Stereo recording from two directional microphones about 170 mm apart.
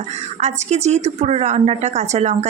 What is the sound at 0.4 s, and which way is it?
A woman's voice, 40° right (ahead or behind).